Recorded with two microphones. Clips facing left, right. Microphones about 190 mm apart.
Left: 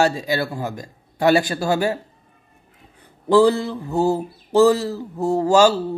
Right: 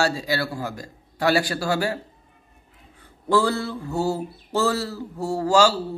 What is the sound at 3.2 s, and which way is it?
Mantra, 15° left (ahead or behind).